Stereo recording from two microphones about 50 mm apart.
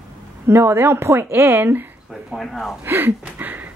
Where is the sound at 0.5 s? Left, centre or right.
Right.